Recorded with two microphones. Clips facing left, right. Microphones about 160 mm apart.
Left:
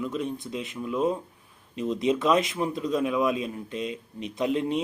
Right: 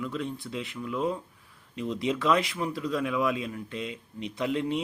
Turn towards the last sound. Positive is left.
turn(degrees=20)  # may be behind; listen again after turning